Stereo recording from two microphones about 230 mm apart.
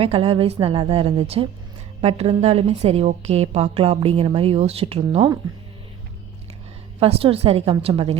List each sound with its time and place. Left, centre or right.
0.0 s a woman's voice: right
7.0 s a woman's voice: right